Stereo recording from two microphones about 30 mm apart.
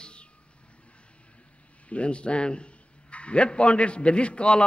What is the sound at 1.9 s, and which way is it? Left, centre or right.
A man's voice, left.